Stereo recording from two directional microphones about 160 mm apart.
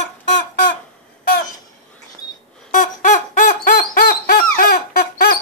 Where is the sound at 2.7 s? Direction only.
50° left (ahead or behind).